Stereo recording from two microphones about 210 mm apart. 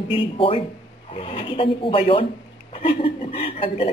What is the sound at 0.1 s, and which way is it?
Speech, 25° left (ahead or behind).